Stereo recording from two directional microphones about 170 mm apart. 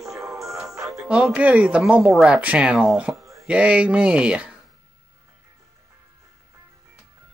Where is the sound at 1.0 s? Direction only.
Centre (ahead or behind).